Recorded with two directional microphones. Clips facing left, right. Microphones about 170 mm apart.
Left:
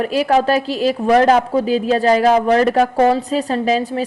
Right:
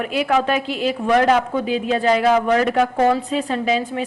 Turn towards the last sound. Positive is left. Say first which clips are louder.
# left 3 dB
turn(degrees=40)  # may be behind; listen again after turning